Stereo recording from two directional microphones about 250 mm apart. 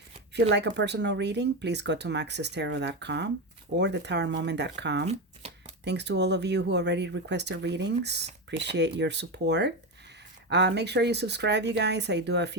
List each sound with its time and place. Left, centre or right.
0.5 s speech: right
5.4 s shuffling cards: right
5.8 s speech: right